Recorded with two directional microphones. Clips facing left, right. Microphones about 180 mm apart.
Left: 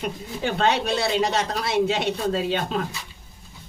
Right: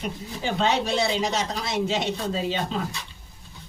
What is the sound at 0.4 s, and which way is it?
A woman's voice, 60° left (ahead or behind).